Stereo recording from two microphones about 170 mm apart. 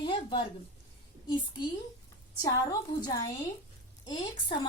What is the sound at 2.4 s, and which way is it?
Speech, 20° left (ahead or behind).